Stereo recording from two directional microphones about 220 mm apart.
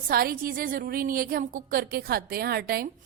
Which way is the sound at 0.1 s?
40° right (ahead or behind).